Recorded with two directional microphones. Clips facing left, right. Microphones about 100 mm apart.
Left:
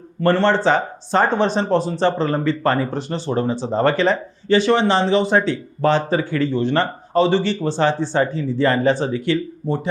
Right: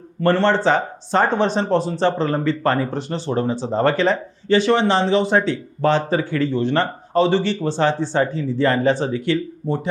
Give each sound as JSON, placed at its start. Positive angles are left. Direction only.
{"t": 0.2, "sound": "speech", "side_deg": 15}
{"t": 9.6, "sound": "speech", "side_deg": 25}